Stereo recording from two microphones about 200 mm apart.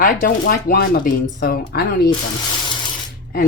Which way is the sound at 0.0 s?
45° left (ahead or behind).